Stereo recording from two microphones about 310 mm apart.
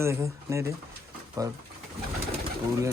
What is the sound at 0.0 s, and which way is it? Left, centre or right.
Speech, centre.